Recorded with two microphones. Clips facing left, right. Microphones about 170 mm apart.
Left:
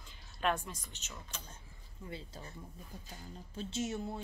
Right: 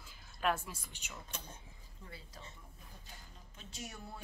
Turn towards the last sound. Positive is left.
turn(degrees=25)  # may be behind; listen again after turning